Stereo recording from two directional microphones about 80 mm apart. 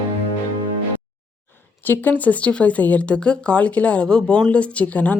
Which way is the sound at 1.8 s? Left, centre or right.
Left.